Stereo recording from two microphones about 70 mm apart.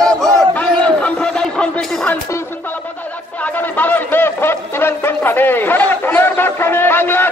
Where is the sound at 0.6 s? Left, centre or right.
Centre.